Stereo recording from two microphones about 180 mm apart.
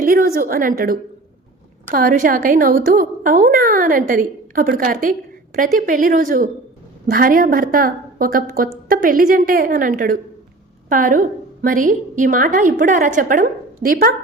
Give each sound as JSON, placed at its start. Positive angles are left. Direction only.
{"t": 0.0, "sound": "a woman's voice", "side_deg": -55}